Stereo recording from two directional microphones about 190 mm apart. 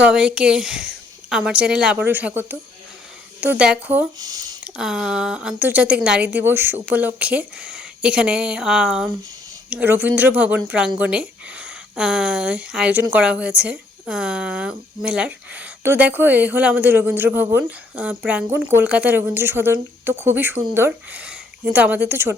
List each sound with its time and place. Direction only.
0.0 s a woman's voice: 5° right (ahead or behind)
4.2 s speech: 20° right (ahead or behind)
4.6 s a woman's voice: 5° right (ahead or behind)